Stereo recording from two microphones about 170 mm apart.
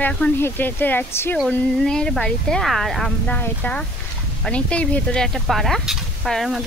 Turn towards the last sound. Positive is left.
turn(degrees=0)  # may be behind; listen again after turning